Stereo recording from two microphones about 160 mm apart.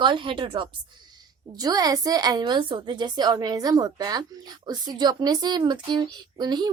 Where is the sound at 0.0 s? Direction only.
30° right (ahead or behind).